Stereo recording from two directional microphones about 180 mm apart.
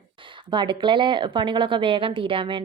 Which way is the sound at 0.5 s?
25° right (ahead or behind).